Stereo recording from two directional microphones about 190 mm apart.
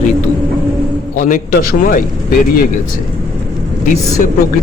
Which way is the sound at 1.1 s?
45° left (ahead or behind).